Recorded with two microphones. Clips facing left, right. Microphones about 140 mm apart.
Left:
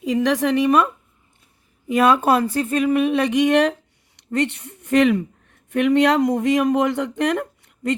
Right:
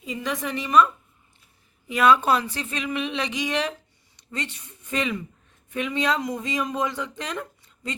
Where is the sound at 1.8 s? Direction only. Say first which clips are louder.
Left 3 dB; 45° left (ahead or behind).